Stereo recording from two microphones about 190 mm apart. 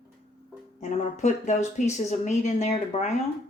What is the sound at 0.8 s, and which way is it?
A woman's voice, 35° left (ahead or behind).